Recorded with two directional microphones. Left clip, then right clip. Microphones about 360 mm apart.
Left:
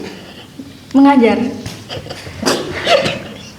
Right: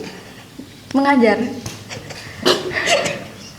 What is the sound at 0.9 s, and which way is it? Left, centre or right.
Speech, right.